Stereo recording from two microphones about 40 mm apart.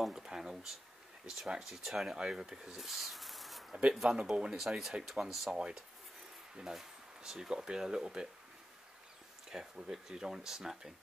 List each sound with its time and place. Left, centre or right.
0.1 s speech: centre
1.6 s speech: centre
2.1 s speech: centre
4.2 s speech: right
4.6 s speech: centre
5.6 s speech: centre
9.5 s speech: centre